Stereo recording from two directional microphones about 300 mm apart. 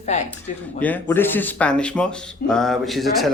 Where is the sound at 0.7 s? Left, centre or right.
Centre.